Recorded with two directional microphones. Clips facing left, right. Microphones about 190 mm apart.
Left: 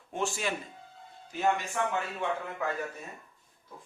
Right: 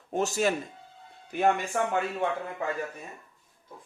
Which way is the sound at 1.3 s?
55° right (ahead or behind).